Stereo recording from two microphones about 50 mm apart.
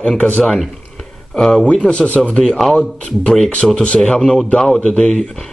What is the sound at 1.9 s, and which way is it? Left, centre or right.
Speech, left.